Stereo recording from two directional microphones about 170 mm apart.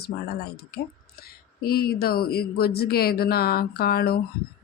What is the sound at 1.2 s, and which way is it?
Speech, 65° left (ahead or behind).